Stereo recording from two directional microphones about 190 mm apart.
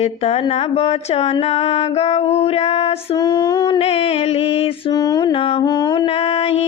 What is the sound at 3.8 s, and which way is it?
Mantra, 30° left (ahead or behind).